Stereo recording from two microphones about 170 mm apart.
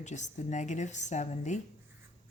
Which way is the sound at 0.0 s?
45° left (ahead or behind).